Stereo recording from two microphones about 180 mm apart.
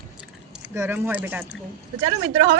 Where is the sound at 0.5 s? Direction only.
10° right (ahead or behind).